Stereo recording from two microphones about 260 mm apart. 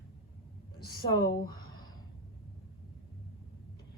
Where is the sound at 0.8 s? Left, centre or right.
Left.